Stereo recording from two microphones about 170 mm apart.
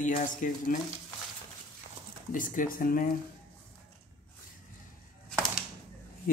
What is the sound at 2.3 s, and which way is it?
Speech, 50° left (ahead or behind).